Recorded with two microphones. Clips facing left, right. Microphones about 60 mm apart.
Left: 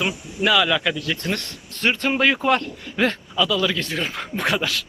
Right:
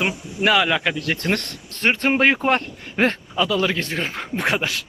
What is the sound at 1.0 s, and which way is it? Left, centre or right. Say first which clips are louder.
Speech: right 3 dB; right.